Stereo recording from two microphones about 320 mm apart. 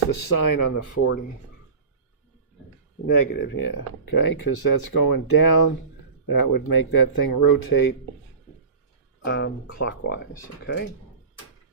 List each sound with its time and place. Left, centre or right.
0.3 s speech: left
3.1 s speech: left
9.2 s speech: left